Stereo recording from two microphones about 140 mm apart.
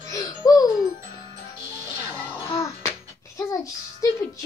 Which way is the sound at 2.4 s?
20° left (ahead or behind).